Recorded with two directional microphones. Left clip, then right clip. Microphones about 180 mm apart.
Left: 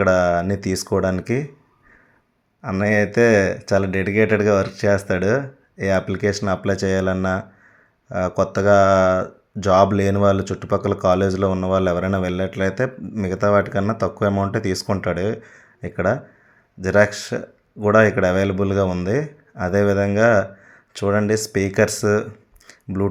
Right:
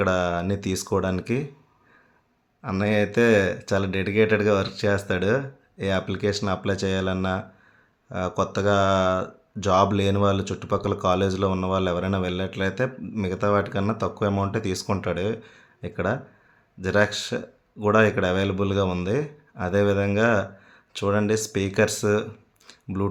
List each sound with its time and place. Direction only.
0.0 s speech: 15° left (ahead or behind)
2.6 s speech: 10° left (ahead or behind)